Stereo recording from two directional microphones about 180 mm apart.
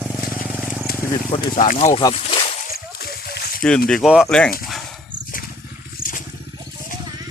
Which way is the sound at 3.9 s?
Centre (ahead or behind).